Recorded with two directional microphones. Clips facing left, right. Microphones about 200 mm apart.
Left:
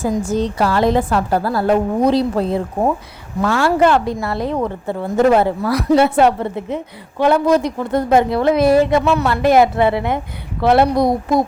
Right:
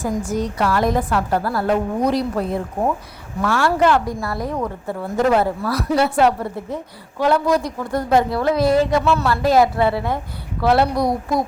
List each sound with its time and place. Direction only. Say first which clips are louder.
0.0 s a woman's voice: left 4 dB; 25° left (ahead or behind)